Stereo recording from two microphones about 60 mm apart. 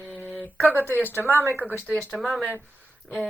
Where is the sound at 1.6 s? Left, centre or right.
Right.